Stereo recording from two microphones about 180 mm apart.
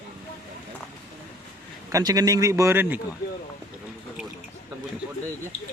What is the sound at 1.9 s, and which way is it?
A man's voice, 20° right (ahead or behind).